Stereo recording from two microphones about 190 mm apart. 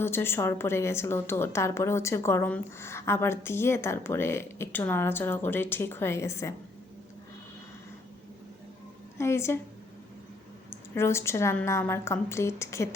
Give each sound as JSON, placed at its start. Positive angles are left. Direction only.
{"t": 0.0, "sound": "a woman's voice", "side_deg": 10}
{"t": 9.1, "sound": "a woman's voice", "side_deg": 15}
{"t": 10.7, "sound": "a woman's voice", "side_deg": 15}